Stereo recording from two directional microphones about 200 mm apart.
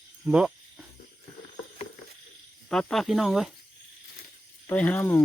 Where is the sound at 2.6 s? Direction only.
Centre (ahead or behind).